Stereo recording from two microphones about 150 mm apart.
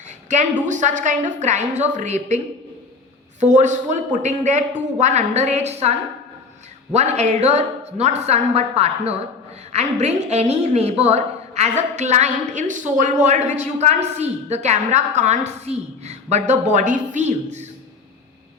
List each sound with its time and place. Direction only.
0.3 s a woman's voice: 55° right (ahead or behind)
3.4 s a woman's voice: 55° right (ahead or behind)